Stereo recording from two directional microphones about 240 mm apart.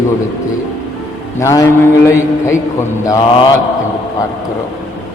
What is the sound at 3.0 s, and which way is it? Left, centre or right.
Mantra, centre.